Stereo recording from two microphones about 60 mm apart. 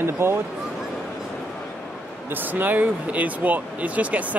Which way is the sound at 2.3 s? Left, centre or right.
Right.